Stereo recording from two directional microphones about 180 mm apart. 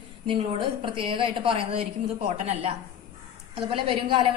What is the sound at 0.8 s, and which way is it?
Speech, 30° right (ahead or behind).